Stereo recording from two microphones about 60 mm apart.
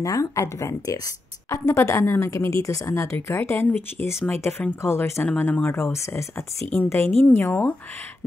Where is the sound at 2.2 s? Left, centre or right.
Left.